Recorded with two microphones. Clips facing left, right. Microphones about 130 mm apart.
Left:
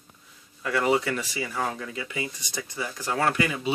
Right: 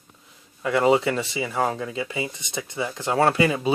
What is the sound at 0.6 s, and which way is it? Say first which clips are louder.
Speech: right 5 dB; 25° right (ahead or behind).